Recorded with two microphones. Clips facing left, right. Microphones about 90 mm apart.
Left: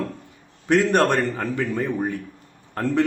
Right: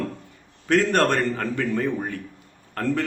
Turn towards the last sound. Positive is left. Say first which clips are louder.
# left 3 dB
turn(degrees=20)  # may be behind; listen again after turning